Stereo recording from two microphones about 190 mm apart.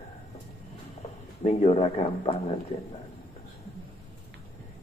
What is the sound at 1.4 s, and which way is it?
Speech, 30° left (ahead or behind).